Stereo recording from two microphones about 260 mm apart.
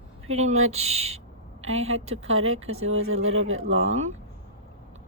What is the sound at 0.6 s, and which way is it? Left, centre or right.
Speech, right.